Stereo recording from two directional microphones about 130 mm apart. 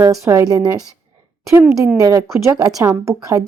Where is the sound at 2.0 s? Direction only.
30° right (ahead or behind).